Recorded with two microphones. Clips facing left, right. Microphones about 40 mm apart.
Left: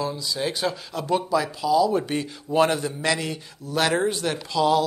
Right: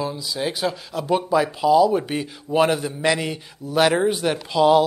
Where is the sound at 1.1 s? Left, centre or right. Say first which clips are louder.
Right 3 dB; right.